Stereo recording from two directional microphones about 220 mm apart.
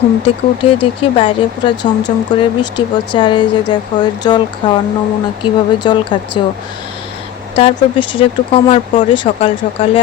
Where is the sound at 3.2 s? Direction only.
20° left (ahead or behind).